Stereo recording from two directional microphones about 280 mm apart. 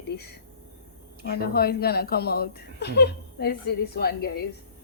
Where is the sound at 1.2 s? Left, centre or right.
Left.